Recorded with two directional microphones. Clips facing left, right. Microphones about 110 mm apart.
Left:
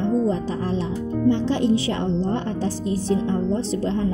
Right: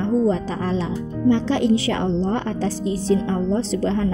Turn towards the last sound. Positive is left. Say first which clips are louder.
# right 2 dB
turn(degrees=-90)